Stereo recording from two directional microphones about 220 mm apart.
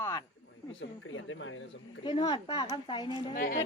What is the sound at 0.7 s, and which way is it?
Speech, 60° left (ahead or behind).